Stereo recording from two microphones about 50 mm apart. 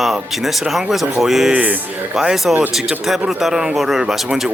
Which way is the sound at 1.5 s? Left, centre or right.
Right.